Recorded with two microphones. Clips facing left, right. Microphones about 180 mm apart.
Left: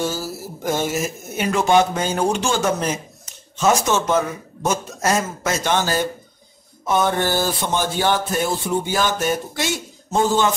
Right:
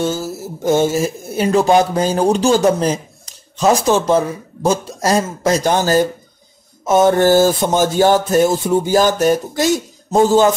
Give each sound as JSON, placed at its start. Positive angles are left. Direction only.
{"t": 0.4, "sound": "speech", "side_deg": -25}